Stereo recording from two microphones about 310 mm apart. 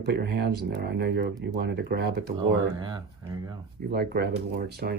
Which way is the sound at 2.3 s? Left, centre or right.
Centre.